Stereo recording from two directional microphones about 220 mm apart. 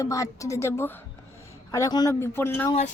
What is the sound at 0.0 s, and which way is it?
A man's voice, 15° left (ahead or behind).